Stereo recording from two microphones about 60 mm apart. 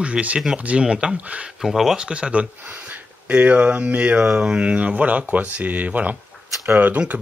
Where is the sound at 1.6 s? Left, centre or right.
Centre.